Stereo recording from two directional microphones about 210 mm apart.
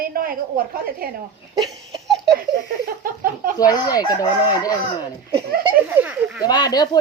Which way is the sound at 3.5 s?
15° left (ahead or behind).